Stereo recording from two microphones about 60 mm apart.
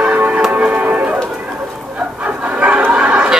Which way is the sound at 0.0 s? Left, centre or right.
Right.